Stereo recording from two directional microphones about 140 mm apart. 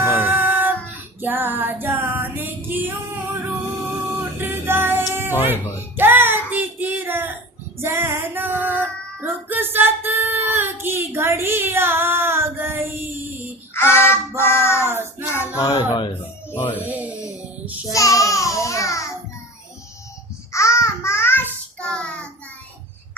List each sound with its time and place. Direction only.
0.0 s music: 15° right (ahead or behind)
4.4 s music: 15° right (ahead or behind)
6.0 s child singing: 15° right (ahead or behind)
7.8 s female singing: 20° right (ahead or behind)
13.7 s child singing: 15° left (ahead or behind)
14.8 s child singing: 15° right (ahead or behind)
15.4 s child singing: 20° left (ahead or behind)
16.6 s music: 15° left (ahead or behind)
16.9 s a sound: 10° right (ahead or behind)
17.9 s child singing: 25° left (ahead or behind)
20.5 s child singing: 20° left (ahead or behind)